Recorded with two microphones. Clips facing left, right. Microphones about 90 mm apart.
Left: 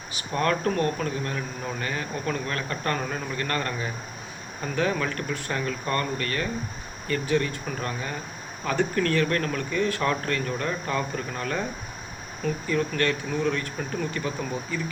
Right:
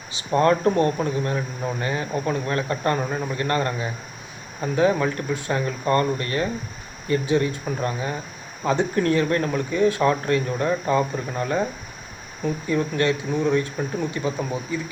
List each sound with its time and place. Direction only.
0.1 s speech: 25° right (ahead or behind)
12.6 s speech: 20° right (ahead or behind)